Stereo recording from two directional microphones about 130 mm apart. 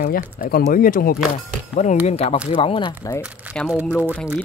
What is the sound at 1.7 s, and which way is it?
Speech, 60° left (ahead or behind).